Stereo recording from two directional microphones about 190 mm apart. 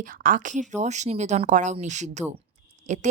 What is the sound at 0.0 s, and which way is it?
Speech, 45° right (ahead or behind).